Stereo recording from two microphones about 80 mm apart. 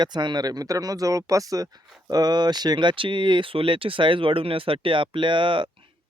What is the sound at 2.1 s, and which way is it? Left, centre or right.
Speech, right.